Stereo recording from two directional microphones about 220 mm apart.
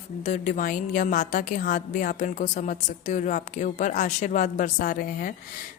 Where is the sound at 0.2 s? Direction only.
35° left (ahead or behind).